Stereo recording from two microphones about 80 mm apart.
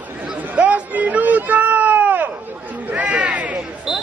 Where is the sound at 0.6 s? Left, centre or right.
Centre.